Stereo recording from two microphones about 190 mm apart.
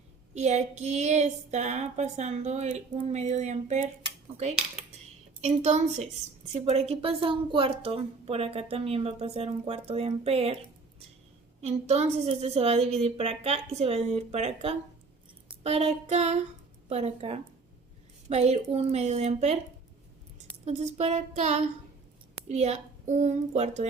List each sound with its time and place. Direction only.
0.3 s a woman's voice: 35° right (ahead or behind)
5.4 s a woman's voice: 35° right (ahead or behind)
11.6 s a woman's voice: 35° right (ahead or behind)
15.4 s child singing: 35° right (ahead or behind)
16.9 s a woman's voice: 35° right (ahead or behind)
20.7 s a woman's voice: 35° right (ahead or behind)